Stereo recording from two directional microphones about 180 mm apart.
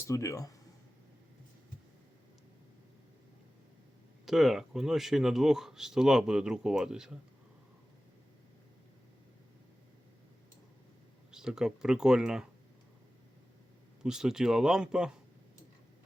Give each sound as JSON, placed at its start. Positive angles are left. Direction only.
{"t": 0.0, "sound": "speech", "side_deg": 15}
{"t": 4.3, "sound": "speech", "side_deg": 0}
{"t": 11.3, "sound": "speech", "side_deg": -5}
{"t": 14.0, "sound": "speech", "side_deg": -5}